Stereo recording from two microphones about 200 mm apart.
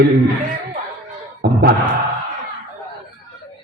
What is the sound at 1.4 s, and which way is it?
Speech, 50° right (ahead or behind).